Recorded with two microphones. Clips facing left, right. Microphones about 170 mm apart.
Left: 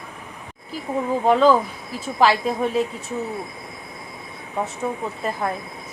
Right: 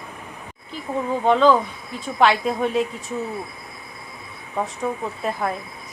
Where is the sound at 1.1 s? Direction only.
5° left (ahead or behind).